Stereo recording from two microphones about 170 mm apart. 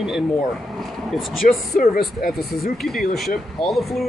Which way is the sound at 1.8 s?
60° left (ahead or behind).